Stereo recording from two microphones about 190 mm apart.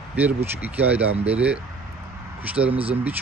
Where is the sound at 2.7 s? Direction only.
30° right (ahead or behind).